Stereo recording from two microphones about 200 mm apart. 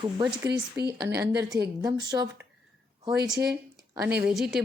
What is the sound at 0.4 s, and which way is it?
Speech, 55° right (ahead or behind).